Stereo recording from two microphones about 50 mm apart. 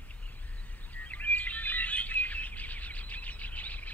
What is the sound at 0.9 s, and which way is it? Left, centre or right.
Bird, left.